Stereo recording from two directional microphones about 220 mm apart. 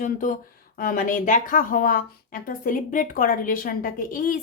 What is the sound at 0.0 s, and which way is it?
Speech, 35° left (ahead or behind).